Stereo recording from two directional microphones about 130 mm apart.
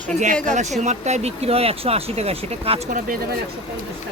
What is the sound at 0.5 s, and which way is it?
Speech, 65° right (ahead or behind).